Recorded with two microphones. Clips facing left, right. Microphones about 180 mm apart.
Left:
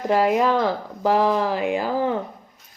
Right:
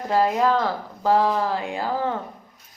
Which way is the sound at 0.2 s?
20° left (ahead or behind).